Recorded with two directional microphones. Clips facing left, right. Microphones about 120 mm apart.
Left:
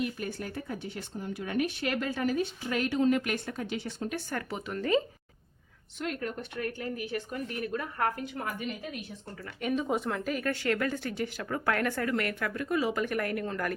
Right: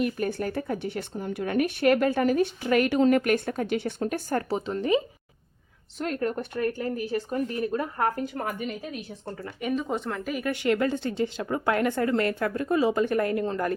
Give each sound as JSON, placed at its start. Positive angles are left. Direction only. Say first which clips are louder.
{"t": 0.0, "sound": "speech", "louder": "right 7 dB", "side_deg": -55}
{"t": 4.3, "sound": "speech", "louder": "right 8 dB", "side_deg": -35}
{"t": 6.0, "sound": "speech", "louder": "right 6 dB", "side_deg": -40}
{"t": 9.6, "sound": "speech", "louder": "right 1 dB", "side_deg": 0}